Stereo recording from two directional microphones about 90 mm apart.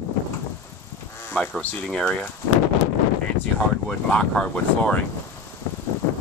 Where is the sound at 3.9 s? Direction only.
10° left (ahead or behind).